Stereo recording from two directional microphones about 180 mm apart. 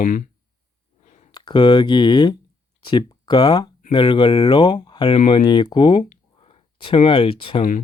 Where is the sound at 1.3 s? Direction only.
25° left (ahead or behind).